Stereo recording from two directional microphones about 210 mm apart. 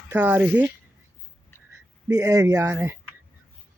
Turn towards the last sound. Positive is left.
turn(degrees=-10)  # may be behind; listen again after turning